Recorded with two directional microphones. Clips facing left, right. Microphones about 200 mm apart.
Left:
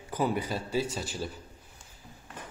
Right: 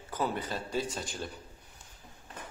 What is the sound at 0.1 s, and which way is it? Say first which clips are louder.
A man's voice: left 4 dB; 10° left (ahead or behind).